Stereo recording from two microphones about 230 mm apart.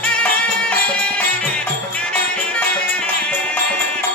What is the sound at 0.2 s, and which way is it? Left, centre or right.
Music, centre.